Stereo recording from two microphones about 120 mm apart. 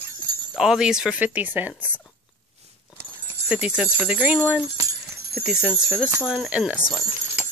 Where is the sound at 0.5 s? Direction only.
5° right (ahead or behind).